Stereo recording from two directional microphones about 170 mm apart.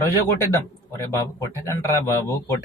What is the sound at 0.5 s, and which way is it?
Speech, 15° left (ahead or behind).